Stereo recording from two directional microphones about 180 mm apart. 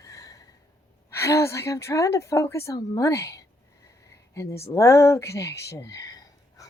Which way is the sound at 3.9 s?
15° left (ahead or behind).